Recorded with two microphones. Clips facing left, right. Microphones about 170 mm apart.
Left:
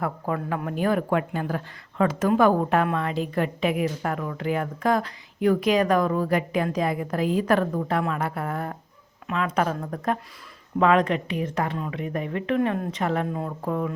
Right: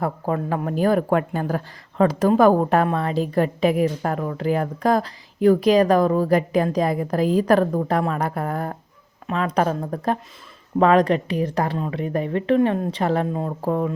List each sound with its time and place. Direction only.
0.0 s speech: 30° right (ahead or behind)